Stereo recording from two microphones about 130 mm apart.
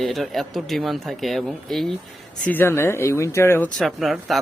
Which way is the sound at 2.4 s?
15° left (ahead or behind).